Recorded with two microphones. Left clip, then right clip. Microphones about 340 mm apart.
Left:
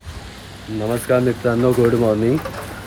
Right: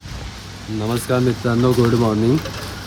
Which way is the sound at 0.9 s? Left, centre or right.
Centre.